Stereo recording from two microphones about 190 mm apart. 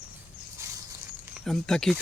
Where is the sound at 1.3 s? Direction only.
Centre (ahead or behind).